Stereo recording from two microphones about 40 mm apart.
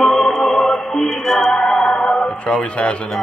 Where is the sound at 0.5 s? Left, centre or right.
Left.